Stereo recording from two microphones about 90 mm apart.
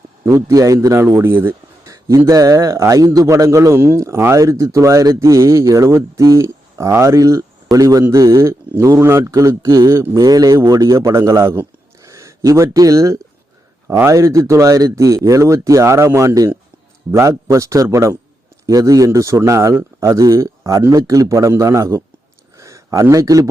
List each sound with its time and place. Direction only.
0.3 s a man's voice: 30° right (ahead or behind)
1.0 s speech: 25° right (ahead or behind)
1.8 s a man's voice: 40° right (ahead or behind)
18.6 s a man's voice: 40° right (ahead or behind)
22.5 s a sound: 35° right (ahead or behind)